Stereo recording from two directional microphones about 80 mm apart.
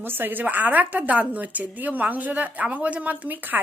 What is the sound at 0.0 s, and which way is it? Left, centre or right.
A woman's voice, right.